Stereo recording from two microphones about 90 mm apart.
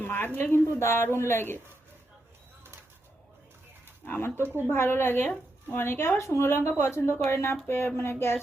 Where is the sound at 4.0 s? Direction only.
25° left (ahead or behind).